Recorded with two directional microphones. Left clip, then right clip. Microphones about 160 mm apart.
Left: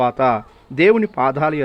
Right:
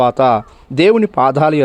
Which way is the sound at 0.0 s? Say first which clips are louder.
Right 5 dB; 25° right (ahead or behind).